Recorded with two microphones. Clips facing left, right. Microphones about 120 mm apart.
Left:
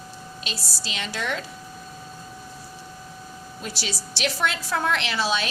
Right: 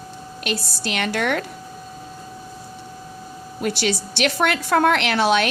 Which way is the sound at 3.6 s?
60° right (ahead or behind).